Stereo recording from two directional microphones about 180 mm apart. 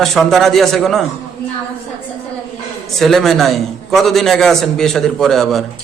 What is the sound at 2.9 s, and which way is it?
A man's voice, centre (ahead or behind).